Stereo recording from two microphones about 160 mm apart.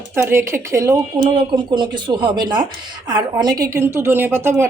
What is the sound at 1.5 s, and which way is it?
Speech, 30° right (ahead or behind).